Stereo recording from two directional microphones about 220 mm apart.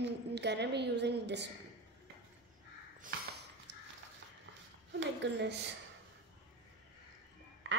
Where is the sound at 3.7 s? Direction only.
50° right (ahead or behind).